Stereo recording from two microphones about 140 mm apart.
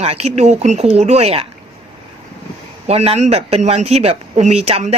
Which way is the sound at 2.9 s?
50° right (ahead or behind).